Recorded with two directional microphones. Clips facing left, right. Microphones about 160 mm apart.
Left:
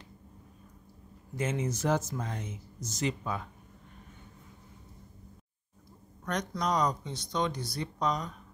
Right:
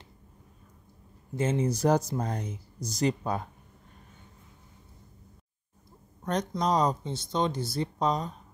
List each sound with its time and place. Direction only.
1.3 s speech: 30° right (ahead or behind)
6.2 s speech: 25° right (ahead or behind)